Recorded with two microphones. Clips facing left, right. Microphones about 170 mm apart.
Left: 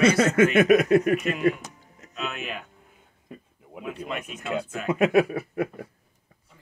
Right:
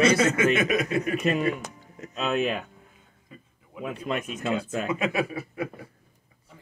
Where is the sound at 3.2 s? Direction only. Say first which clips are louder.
Left 6 dB; 60° left (ahead or behind).